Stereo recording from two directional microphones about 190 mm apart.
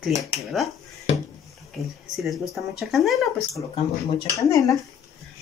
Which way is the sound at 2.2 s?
Centre (ahead or behind).